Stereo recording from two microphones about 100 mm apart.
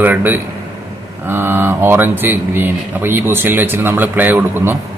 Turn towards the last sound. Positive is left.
turn(degrees=-20)  # may be behind; listen again after turning